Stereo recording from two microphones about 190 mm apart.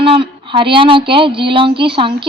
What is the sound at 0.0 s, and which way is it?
Speech, 25° right (ahead or behind).